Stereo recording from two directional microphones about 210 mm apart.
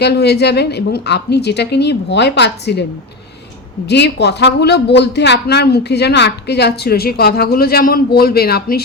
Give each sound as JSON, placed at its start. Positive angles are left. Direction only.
{"t": 0.0, "sound": "speech", "side_deg": 50}
{"t": 3.8, "sound": "speech", "side_deg": 55}